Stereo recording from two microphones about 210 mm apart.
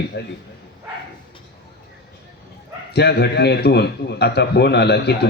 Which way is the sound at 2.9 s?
50° left (ahead or behind).